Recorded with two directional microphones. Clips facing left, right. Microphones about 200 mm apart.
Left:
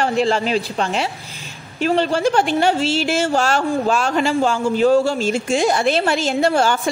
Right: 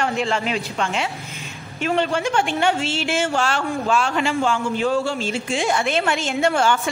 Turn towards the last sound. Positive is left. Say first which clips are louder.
# left 2 dB
turn(degrees=35)  # may be behind; listen again after turning